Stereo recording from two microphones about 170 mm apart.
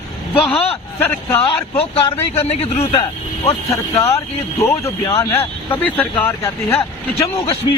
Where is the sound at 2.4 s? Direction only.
40° left (ahead or behind).